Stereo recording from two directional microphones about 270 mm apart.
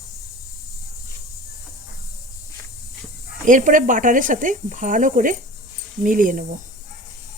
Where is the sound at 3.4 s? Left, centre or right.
Right.